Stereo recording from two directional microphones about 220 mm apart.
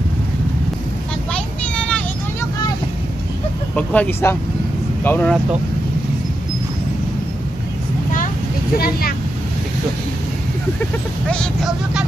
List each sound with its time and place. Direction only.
1.3 s vehicle: 5° left (ahead or behind)
3.7 s speech: 5° left (ahead or behind)
8.7 s speech: 45° left (ahead or behind)
11.2 s speech: centre (ahead or behind)